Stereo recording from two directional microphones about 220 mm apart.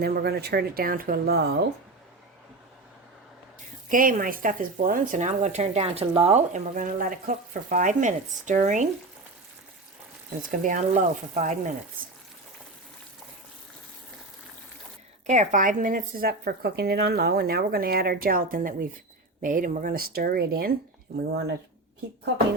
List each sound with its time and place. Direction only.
0.0 s speech: 45° right (ahead or behind)
3.8 s speech: 40° right (ahead or behind)
10.5 s speech: 35° right (ahead or behind)
15.3 s speech: 35° right (ahead or behind)